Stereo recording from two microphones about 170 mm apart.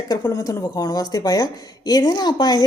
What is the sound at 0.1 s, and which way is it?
A woman's voice, 20° left (ahead or behind).